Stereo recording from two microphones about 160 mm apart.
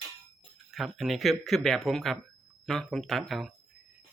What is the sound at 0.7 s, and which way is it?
Speech, centre (ahead or behind).